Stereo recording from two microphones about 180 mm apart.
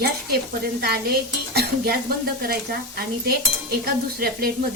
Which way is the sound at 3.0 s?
60° right (ahead or behind).